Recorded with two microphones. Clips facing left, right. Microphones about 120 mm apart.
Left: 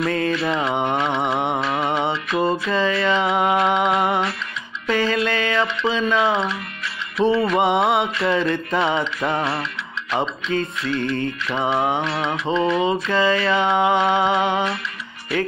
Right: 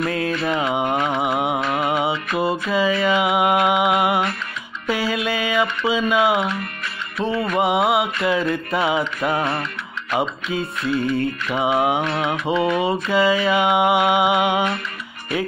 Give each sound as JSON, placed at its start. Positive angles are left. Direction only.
{"t": 0.0, "sound": "music", "side_deg": -5}
{"t": 4.8, "sound": "mantra", "side_deg": -10}
{"t": 7.2, "sound": "music", "side_deg": -50}
{"t": 7.5, "sound": "music", "side_deg": -5}
{"t": 9.4, "sound": "music", "side_deg": -50}
{"t": 10.5, "sound": "mantra", "side_deg": -5}
{"t": 12.0, "sound": "music", "side_deg": -50}
{"t": 12.3, "sound": "mantra", "side_deg": -10}